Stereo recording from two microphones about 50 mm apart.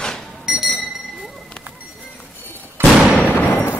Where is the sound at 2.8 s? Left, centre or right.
Right.